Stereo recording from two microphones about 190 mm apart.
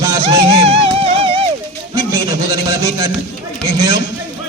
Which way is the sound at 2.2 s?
20° right (ahead or behind).